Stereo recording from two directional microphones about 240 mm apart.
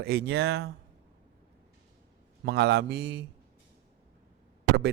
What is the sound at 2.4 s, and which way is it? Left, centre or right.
Speech, right.